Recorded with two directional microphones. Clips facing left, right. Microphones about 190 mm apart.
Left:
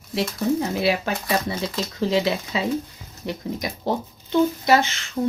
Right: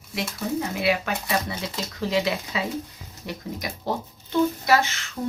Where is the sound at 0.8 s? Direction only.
30° left (ahead or behind).